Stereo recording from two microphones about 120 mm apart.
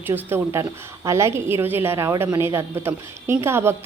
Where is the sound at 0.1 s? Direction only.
20° right (ahead or behind).